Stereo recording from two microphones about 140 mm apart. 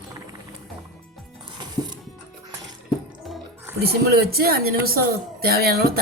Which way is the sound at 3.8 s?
90° right.